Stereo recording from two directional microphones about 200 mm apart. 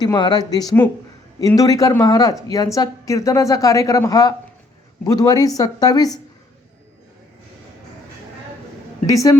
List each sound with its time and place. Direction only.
0.0 s a woman's voice: 20° left (ahead or behind)
9.0 s a woman's voice: 15° left (ahead or behind)